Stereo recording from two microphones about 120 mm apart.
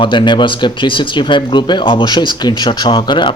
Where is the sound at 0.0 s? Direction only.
40° left (ahead or behind).